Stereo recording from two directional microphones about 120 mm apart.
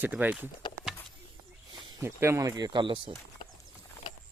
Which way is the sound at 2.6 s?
35° right (ahead or behind).